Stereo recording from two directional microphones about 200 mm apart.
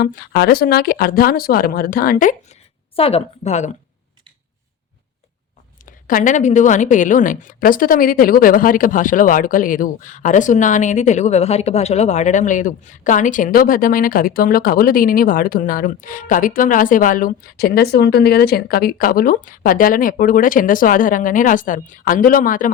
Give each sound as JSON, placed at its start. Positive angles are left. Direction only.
{"t": 0.0, "sound": "a woman's voice", "side_deg": 50}
{"t": 2.9, "sound": "speech", "side_deg": 30}
{"t": 5.8, "sound": "a woman's voice", "side_deg": 40}